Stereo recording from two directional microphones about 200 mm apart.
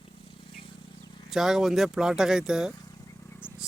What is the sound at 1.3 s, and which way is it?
Speech, centre (ahead or behind).